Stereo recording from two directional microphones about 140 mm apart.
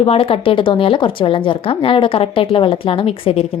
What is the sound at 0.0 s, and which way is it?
Speech, 45° left (ahead or behind).